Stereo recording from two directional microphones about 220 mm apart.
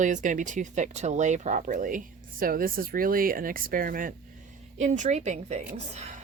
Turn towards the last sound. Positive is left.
turn(degrees=-30)  # may be behind; listen again after turning